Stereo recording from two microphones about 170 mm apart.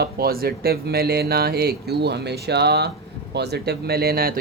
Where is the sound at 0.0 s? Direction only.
65° right (ahead or behind).